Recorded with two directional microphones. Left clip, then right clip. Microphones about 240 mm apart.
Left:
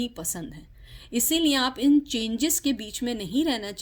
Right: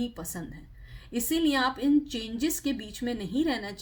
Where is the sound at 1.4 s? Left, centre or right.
Left.